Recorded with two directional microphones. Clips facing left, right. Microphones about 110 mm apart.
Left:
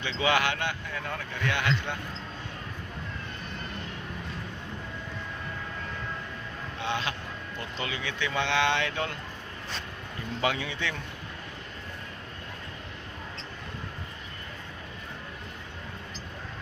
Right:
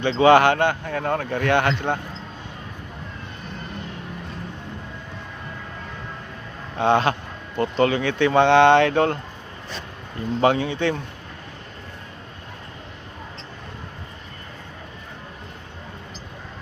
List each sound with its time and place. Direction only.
0.0 s speech: 45° right (ahead or behind)
6.7 s speech: 55° right (ahead or behind)
10.4 s speech: 40° right (ahead or behind)